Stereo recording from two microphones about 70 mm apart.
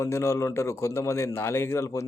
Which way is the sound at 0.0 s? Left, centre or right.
Left.